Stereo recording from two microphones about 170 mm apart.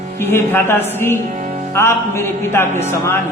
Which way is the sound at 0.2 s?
15° left (ahead or behind).